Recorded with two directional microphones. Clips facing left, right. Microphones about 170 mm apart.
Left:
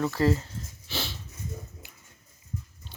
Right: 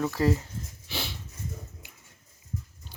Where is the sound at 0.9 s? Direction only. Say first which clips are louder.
Left 1 dB; 15° right (ahead or behind).